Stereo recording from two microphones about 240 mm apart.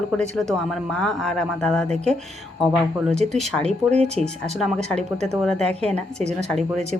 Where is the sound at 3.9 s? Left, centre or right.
Right.